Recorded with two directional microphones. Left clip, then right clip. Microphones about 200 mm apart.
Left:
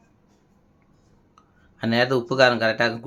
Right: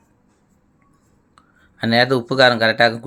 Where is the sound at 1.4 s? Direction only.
20° right (ahead or behind).